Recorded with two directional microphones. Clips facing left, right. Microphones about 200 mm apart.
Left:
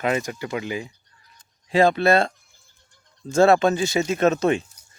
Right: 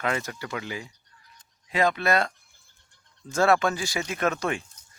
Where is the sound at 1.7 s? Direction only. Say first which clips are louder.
Left 6 dB; 30° left (ahead or behind).